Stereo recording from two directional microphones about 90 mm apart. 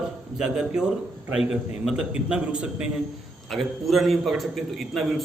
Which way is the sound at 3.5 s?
Centre (ahead or behind).